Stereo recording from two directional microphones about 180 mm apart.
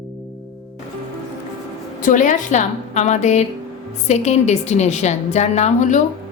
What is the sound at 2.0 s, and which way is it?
A woman's voice, 45° left (ahead or behind).